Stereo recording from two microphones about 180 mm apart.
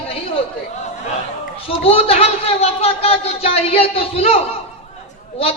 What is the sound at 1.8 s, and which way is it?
Speech, 35° left (ahead or behind).